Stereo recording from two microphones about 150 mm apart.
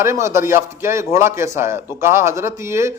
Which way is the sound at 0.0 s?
20° right (ahead or behind).